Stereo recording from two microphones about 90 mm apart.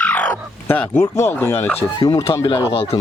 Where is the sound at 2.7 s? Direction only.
90° left.